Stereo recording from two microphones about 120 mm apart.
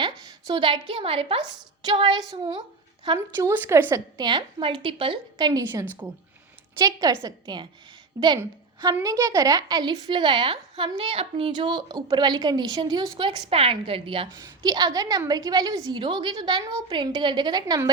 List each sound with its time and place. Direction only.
0.0 s a woman's voice: 40° right (ahead or behind)
3.3 s speech: 20° right (ahead or behind)
4.2 s a woman's voice: 40° right (ahead or behind)
14.3 s a woman's voice: 30° right (ahead or behind)